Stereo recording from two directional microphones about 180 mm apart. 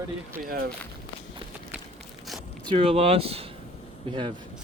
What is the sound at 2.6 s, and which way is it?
Speech, 30° right (ahead or behind).